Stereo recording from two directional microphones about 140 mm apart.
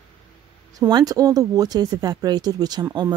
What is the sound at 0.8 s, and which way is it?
Speech, 30° right (ahead or behind).